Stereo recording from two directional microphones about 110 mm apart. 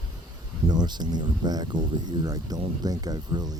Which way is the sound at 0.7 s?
40° right (ahead or behind).